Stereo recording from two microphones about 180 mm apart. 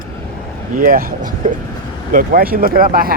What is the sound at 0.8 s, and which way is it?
Speech, 50° right (ahead or behind).